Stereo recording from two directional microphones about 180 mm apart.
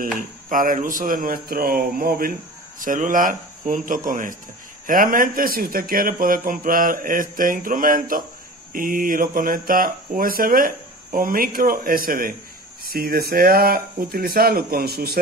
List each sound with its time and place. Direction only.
0.5 s speech: 45° right (ahead or behind)